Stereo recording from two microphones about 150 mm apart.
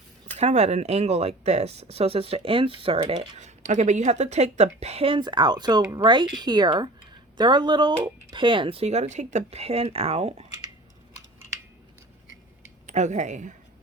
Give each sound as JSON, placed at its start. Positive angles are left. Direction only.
{"t": 0.3, "sound": "speech", "side_deg": -50}
{"t": 12.9, "sound": "speech", "side_deg": -50}